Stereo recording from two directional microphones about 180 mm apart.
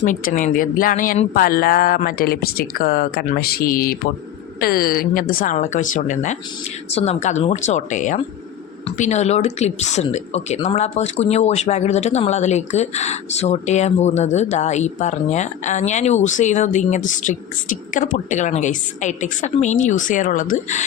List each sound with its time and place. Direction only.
0.0 s speech: 45° left (ahead or behind)